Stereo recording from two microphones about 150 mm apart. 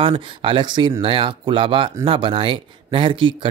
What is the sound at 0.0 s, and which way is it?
Speech, 35° right (ahead or behind).